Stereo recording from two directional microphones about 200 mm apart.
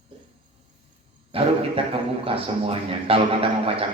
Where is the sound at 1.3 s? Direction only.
30° right (ahead or behind).